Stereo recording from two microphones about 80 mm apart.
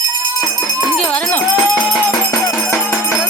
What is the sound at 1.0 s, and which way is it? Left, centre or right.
Music, centre.